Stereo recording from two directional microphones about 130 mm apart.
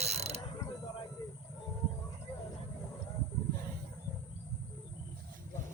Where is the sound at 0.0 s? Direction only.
55° right (ahead or behind).